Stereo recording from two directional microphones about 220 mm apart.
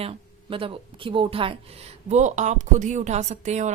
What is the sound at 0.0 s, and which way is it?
Speech, 25° right (ahead or behind).